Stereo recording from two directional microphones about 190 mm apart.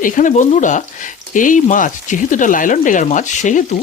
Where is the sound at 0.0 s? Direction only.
40° left (ahead or behind).